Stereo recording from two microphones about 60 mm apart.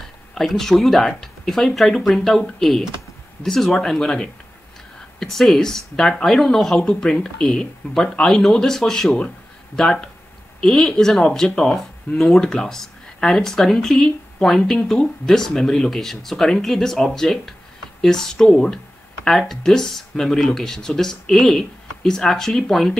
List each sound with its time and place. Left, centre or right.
0.3 s speech: centre